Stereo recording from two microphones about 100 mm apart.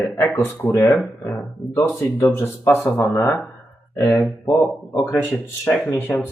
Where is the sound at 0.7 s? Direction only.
35° left (ahead or behind).